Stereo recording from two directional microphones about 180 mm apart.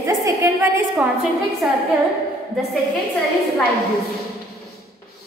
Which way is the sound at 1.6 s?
5° right (ahead or behind).